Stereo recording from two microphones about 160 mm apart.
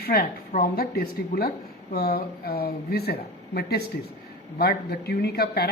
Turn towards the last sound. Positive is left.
turn(degrees=80)